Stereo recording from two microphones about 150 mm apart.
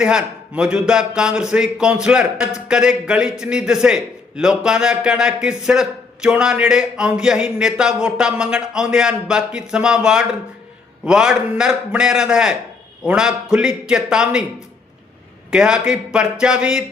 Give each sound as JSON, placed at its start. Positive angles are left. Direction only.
{"t": 0.0, "sound": "a man's voice", "side_deg": -5}
{"t": 15.4, "sound": "a man's voice", "side_deg": -5}